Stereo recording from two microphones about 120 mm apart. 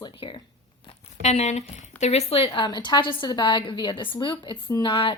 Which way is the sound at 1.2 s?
75° left (ahead or behind).